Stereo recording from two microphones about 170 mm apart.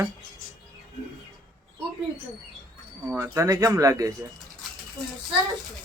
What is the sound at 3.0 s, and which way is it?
Speech, 15° right (ahead or behind).